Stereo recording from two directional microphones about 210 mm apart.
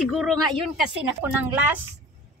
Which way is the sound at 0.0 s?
Centre (ahead or behind).